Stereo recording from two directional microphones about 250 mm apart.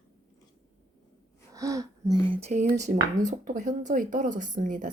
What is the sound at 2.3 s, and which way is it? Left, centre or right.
Speech, right.